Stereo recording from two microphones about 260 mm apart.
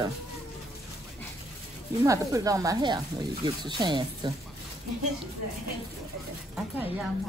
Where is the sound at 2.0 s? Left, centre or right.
Centre.